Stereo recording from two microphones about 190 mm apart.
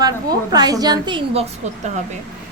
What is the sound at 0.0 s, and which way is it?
A woman's voice, 20° right (ahead or behind).